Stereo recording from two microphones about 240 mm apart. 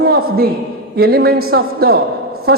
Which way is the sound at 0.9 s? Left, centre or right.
Right.